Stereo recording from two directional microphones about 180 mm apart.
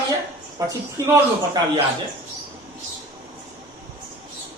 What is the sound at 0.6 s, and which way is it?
Speech, 15° right (ahead or behind).